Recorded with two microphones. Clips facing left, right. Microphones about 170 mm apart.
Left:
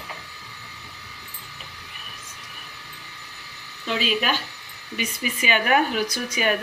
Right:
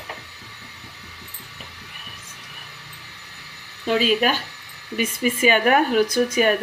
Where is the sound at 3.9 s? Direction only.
45° right (ahead or behind).